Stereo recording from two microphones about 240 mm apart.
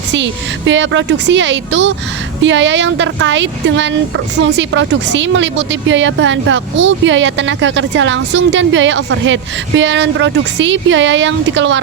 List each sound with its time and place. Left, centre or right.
0.1 s speech: right